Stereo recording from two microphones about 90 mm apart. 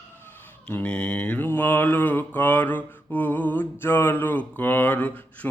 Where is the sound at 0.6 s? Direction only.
15° left (ahead or behind).